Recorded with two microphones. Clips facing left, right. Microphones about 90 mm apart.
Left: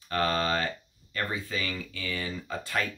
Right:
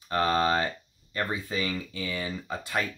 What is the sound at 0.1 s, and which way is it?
Speech, 20° right (ahead or behind).